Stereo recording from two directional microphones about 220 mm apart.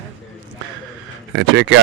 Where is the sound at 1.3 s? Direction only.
55° right (ahead or behind).